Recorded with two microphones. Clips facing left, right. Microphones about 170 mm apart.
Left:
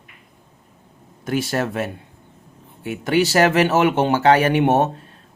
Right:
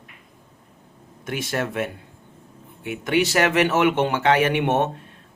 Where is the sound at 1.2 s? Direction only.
35° left (ahead or behind).